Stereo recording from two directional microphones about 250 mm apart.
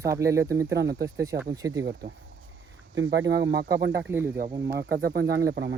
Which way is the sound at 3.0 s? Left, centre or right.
Right.